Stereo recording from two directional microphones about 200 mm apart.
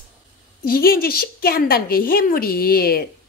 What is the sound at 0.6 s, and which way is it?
A woman's voice, 50° left (ahead or behind).